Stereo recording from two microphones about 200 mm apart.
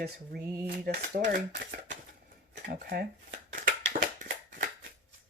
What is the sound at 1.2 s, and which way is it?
Speech, 40° right (ahead or behind).